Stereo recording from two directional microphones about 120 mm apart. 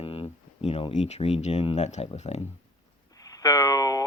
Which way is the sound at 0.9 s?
65° left (ahead or behind).